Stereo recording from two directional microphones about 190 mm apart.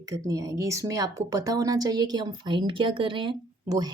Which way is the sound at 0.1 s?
20° right (ahead or behind).